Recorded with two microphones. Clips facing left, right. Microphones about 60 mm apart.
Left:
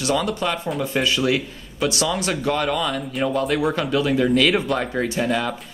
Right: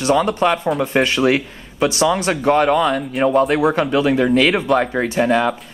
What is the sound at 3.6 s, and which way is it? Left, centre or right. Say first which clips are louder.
A man's voice: right 5 dB; right.